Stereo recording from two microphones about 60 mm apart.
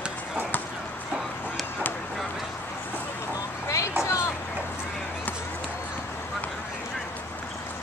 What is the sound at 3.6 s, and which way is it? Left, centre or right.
Vehicle, left.